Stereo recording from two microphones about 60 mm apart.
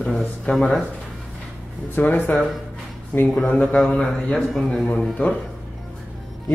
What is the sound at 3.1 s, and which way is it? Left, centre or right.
Speech, centre.